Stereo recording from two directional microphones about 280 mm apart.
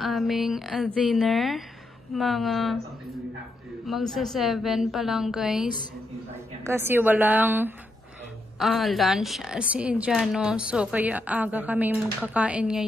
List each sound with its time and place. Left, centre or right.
0.0 s a woman's voice: centre
3.8 s a woman's voice: centre